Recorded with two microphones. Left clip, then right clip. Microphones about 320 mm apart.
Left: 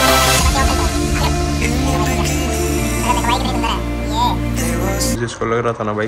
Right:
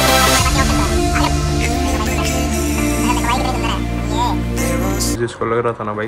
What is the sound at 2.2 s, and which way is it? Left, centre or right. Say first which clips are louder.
Music: even; centre.